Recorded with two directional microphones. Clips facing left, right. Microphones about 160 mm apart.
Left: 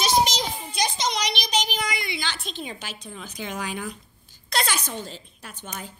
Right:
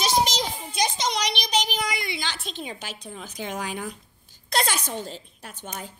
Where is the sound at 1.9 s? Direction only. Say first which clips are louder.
Even; 45° right (ahead or behind).